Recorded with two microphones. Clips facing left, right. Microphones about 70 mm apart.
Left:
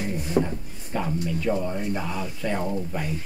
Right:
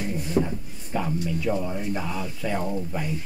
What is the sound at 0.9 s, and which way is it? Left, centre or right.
Speech, centre.